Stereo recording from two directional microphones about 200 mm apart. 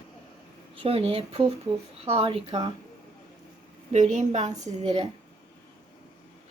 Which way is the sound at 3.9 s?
35° right (ahead or behind).